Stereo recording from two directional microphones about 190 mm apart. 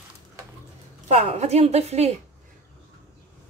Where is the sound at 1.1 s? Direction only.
35° right (ahead or behind).